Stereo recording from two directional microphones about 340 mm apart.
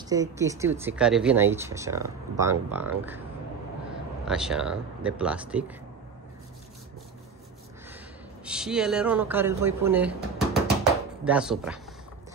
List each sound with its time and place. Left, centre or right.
0.1 s speech: centre
4.3 s speech: centre
8.5 s speech: centre